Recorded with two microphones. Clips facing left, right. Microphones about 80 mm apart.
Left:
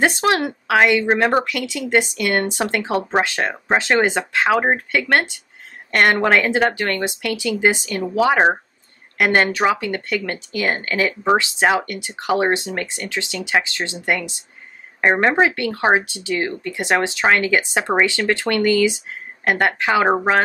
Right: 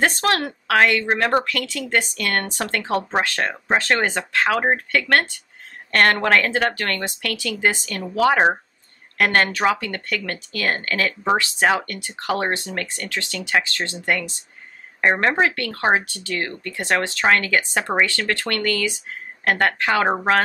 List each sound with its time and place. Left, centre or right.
0.0 s speech: centre